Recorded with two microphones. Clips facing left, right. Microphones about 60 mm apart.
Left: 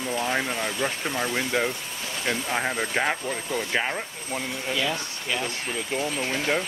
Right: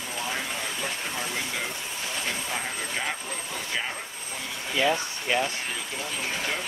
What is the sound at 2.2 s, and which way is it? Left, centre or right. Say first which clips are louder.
Speech: left 8 dB; left.